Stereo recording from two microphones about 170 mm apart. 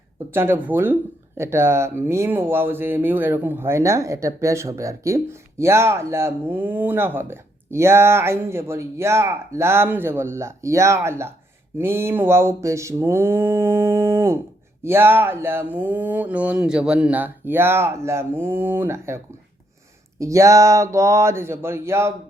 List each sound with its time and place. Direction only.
0.3 s speech: 15° right (ahead or behind)